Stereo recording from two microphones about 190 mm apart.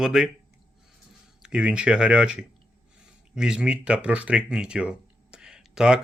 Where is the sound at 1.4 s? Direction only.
5° right (ahead or behind).